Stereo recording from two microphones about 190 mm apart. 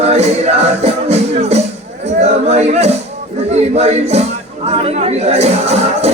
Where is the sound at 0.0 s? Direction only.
35° right (ahead or behind).